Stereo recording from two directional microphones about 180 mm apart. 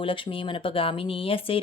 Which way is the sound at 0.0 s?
30° left (ahead or behind).